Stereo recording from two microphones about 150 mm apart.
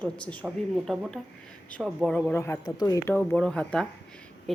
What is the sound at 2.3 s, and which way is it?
Speech, 20° left (ahead or behind).